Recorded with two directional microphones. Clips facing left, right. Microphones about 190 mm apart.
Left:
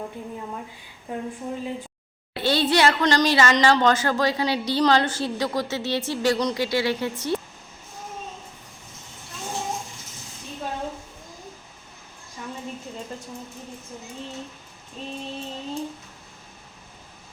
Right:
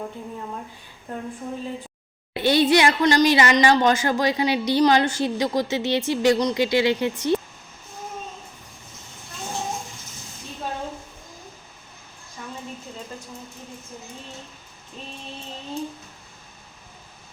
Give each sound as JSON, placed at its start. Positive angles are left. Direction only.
{"t": 1.1, "sound": "speech", "side_deg": 10}
{"t": 2.3, "sound": "speech", "side_deg": -15}